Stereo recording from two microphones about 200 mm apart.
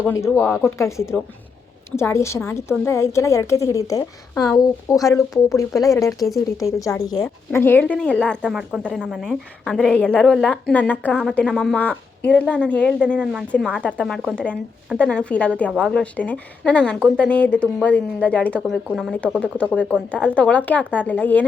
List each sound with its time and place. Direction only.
0.0 s a woman's voice: 15° left (ahead or behind)
6.1 s a woman's voice: centre (ahead or behind)
6.6 s a woman's voice: 15° left (ahead or behind)